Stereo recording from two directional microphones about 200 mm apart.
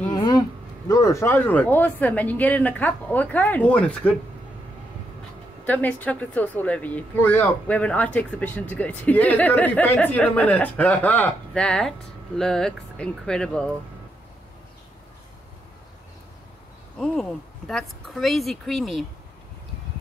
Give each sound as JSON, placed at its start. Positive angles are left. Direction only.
{"t": 0.1, "sound": "a sound", "side_deg": 20}
{"t": 0.8, "sound": "speech", "side_deg": 15}
{"t": 5.7, "sound": "speech", "side_deg": 10}
{"t": 17.0, "sound": "speech", "side_deg": 0}